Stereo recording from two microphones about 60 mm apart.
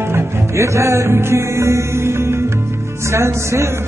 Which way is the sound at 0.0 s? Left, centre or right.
Right.